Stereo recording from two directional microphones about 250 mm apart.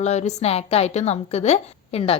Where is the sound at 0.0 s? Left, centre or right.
Left.